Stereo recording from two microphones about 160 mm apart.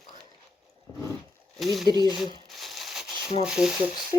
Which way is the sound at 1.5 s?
Centre (ahead or behind).